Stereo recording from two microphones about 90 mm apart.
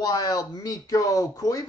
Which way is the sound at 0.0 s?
45° left (ahead or behind).